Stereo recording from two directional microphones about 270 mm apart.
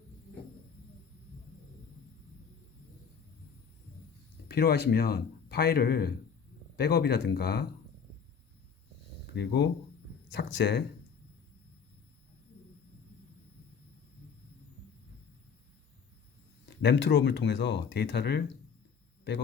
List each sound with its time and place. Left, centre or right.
4.4 s speech: left
9.3 s speech: left
16.6 s speech: left